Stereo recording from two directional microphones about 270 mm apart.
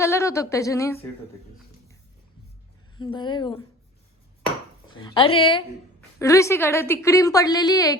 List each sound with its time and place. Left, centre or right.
0.0 s a woman's voice: centre
3.0 s a woman's voice: centre
5.0 s a woman's voice: centre